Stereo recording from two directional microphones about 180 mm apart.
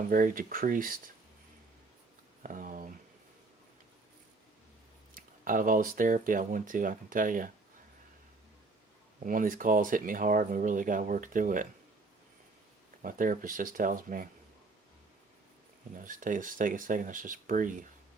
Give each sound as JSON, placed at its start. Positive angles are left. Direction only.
{"t": 0.1, "sound": "speech", "side_deg": -50}
{"t": 2.4, "sound": "a sound", "side_deg": -50}
{"t": 5.1, "sound": "speech", "side_deg": -50}
{"t": 9.2, "sound": "speech", "side_deg": -50}
{"t": 13.0, "sound": "speech", "side_deg": -50}
{"t": 16.0, "sound": "speech", "side_deg": -50}